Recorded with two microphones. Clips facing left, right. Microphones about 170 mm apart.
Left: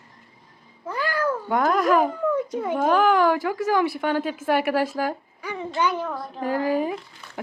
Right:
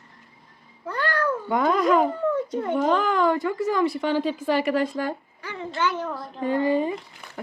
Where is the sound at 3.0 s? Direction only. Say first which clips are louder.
Left 3 dB; 75° left (ahead or behind).